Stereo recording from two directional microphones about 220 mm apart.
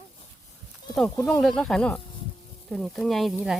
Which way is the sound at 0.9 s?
Centre (ahead or behind).